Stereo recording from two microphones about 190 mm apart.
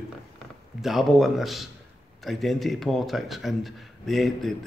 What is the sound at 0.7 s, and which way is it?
Speech, centre (ahead or behind).